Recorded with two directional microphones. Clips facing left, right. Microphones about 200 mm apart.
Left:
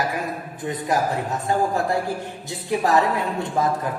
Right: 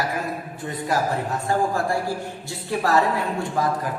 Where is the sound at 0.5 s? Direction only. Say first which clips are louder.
Left 2 dB; 20° left (ahead or behind).